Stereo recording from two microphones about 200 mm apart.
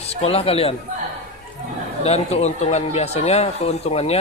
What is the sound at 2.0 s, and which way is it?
Speech, 30° left (ahead or behind).